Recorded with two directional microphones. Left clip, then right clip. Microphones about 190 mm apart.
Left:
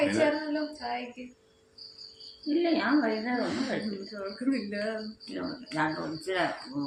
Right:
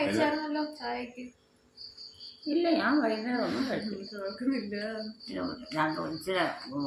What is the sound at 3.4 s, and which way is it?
Speech, 10° left (ahead or behind).